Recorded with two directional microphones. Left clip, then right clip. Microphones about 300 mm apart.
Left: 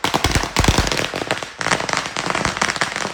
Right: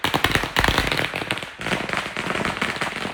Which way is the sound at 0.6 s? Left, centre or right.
Left.